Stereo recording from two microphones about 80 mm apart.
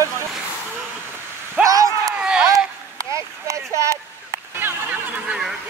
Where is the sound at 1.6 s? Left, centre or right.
Right.